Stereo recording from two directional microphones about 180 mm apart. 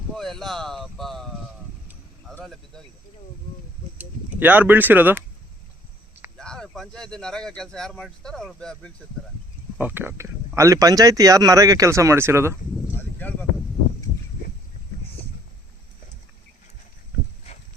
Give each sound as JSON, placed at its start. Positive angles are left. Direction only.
{"t": 0.2, "sound": "speech", "side_deg": 0}
{"t": 2.3, "sound": "speech", "side_deg": 0}
{"t": 3.9, "sound": "speech", "side_deg": -10}
{"t": 6.3, "sound": "speech", "side_deg": 5}
{"t": 9.7, "sound": "speech", "side_deg": -10}